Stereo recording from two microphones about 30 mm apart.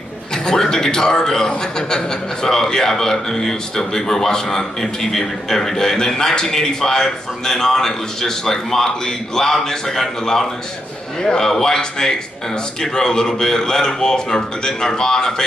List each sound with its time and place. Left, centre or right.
0.3 s a man's voice: left